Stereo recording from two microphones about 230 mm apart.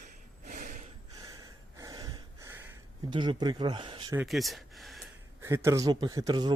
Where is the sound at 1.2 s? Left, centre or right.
Centre.